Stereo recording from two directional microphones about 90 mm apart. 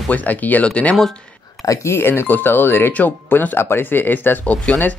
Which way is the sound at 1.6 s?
35° left (ahead or behind).